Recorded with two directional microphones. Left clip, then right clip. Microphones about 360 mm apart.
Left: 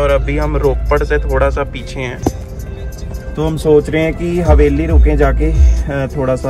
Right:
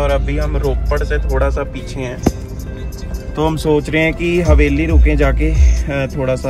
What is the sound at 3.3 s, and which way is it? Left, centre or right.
Speech, centre.